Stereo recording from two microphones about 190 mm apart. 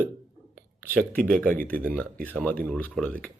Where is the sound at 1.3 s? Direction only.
5° left (ahead or behind).